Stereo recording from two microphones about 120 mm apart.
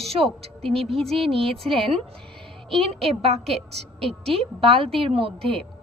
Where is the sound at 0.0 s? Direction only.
55° right (ahead or behind).